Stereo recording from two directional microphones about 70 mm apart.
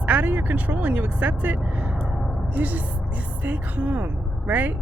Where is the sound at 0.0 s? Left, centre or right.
Right.